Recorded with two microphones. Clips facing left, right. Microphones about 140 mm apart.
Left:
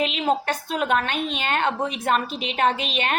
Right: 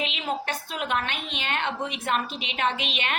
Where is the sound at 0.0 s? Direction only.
45° left (ahead or behind).